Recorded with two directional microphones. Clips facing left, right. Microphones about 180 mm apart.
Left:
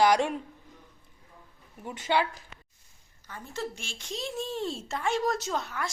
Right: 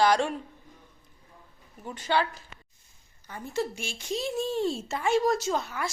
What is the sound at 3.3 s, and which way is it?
Speech, 15° right (ahead or behind).